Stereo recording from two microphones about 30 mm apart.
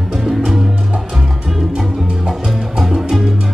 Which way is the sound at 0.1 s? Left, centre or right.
Centre.